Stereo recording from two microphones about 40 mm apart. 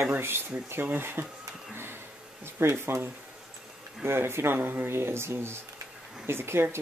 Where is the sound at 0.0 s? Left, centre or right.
Right.